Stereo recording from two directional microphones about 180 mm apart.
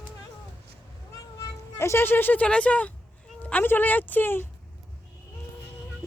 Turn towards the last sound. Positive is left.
turn(degrees=10)  # may be behind; listen again after turning